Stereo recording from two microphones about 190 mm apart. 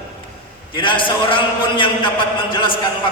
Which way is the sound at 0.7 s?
25° left (ahead or behind).